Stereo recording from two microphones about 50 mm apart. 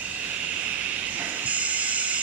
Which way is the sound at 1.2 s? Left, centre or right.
Right.